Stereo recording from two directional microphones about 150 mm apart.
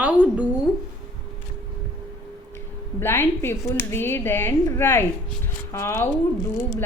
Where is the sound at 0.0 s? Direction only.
10° right (ahead or behind).